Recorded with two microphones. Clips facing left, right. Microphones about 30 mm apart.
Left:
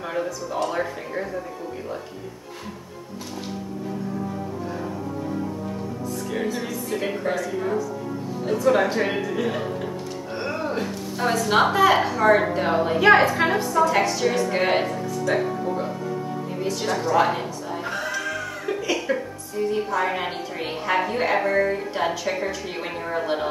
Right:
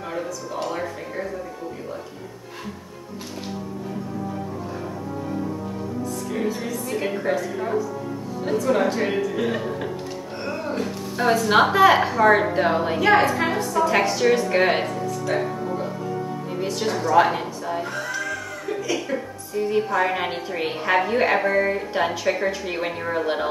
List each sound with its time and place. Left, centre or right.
0.0 s a woman's voice: centre
6.6 s a woman's voice: centre
8.5 s a woman's voice: centre
10.3 s music: centre
11.1 s a woman's voice: centre
13.4 s a woman's voice: centre
13.8 s a woman's voice: centre
15.3 s a woman's voice: centre
16.6 s a woman's voice: centre
17.8 s cat: centre
19.7 s a woman's voice: centre